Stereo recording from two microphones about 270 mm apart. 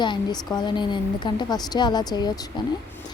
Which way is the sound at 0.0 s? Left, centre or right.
Centre.